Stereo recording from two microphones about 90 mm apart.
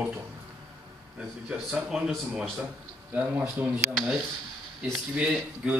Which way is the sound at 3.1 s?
15° right (ahead or behind).